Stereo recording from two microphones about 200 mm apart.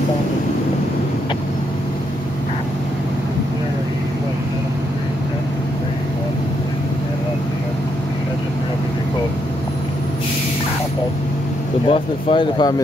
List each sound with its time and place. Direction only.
11.9 s speech: 25° left (ahead or behind)